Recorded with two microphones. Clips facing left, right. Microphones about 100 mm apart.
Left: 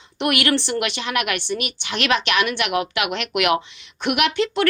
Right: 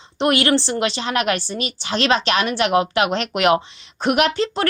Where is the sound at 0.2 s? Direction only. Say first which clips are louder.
Right 3 dB; 30° right (ahead or behind).